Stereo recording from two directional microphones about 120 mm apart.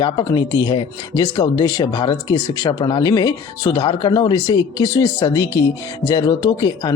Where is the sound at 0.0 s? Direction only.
40° left (ahead or behind).